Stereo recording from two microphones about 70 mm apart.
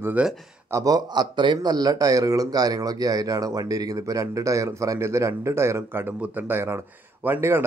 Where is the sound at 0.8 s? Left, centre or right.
Right.